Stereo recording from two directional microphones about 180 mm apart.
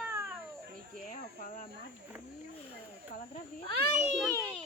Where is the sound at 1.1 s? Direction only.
50° left (ahead or behind).